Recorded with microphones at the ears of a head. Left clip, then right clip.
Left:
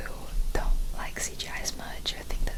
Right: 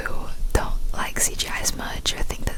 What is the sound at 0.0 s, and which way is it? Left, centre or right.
Whispering, right.